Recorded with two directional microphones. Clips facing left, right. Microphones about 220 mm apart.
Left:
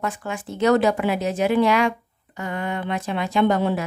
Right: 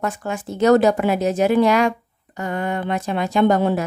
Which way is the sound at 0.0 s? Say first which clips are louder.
Right 3 dB; 40° right (ahead or behind).